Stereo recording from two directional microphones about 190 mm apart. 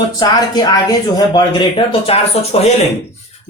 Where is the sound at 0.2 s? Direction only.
20° left (ahead or behind).